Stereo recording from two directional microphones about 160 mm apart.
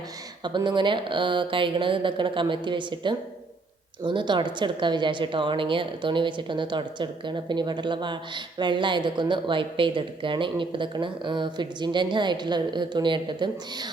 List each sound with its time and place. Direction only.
0.4 s a woman's voice: 30° right (ahead or behind)